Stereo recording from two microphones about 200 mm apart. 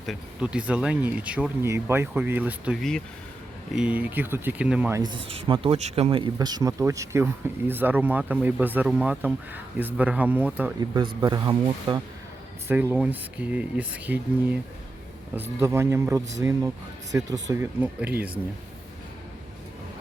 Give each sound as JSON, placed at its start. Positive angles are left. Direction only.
{"t": 0.0, "sound": "speech", "side_deg": 0}
{"t": 10.8, "sound": "speech", "side_deg": -20}
{"t": 15.6, "sound": "speech", "side_deg": -15}